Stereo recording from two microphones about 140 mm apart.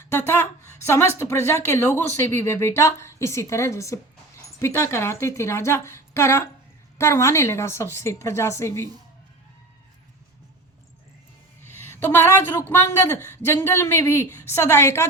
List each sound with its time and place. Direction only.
0.0 s a woman's voice: 15° left (ahead or behind)
11.6 s speech: 15° left (ahead or behind)